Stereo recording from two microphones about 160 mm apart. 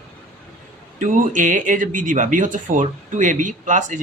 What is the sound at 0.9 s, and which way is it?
Speech, 55° right (ahead or behind).